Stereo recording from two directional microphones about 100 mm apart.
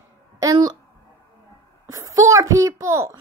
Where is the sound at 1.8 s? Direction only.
35° right (ahead or behind).